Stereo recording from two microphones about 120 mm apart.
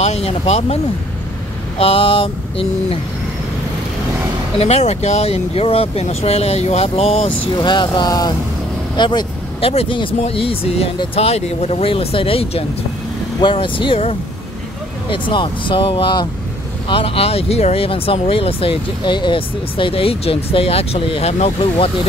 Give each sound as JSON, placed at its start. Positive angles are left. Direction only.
{"t": 0.0, "sound": "speech", "side_deg": 60}
{"t": 1.8, "sound": "speech", "side_deg": 50}
{"t": 4.6, "sound": "speech", "side_deg": 60}
{"t": 7.6, "sound": "speech", "side_deg": 40}
{"t": 9.6, "sound": "speech", "side_deg": 55}